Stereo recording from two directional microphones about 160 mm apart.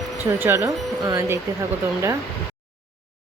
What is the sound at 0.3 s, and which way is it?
A woman's voice, 15° right (ahead or behind).